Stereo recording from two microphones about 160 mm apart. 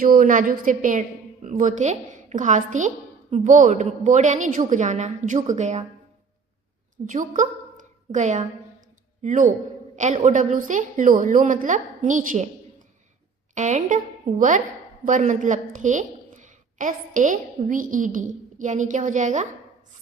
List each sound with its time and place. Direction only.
0.0 s a woman's voice: 60° right (ahead or behind); by 5.8 s 45° right (ahead or behind)
6.9 s a woman's voice: 55° right (ahead or behind)
13.5 s a woman's voice: 50° right (ahead or behind)